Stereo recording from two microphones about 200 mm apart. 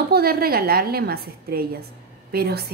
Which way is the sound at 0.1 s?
50° right (ahead or behind).